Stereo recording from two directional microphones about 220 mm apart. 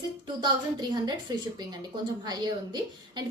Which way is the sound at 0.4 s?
20° right (ahead or behind).